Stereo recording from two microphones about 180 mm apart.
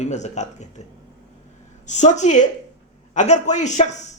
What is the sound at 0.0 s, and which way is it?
Speech, 40° left (ahead or behind).